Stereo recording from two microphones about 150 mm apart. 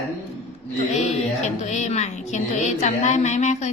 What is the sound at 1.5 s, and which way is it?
A woman's voice, 50° left (ahead or behind).